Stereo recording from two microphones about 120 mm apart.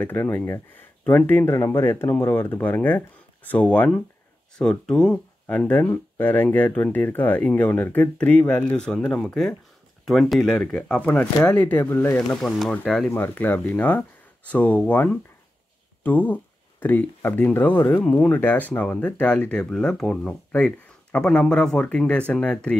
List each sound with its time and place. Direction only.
0.0 s speech: 15° left (ahead or behind)
12.3 s speech: centre (ahead or behind)
13.1 s speech: 15° left (ahead or behind)